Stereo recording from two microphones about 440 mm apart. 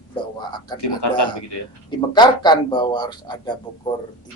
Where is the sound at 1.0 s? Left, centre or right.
Left.